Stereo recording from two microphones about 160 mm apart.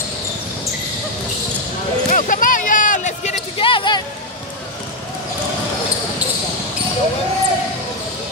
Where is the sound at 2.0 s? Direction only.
55° left (ahead or behind).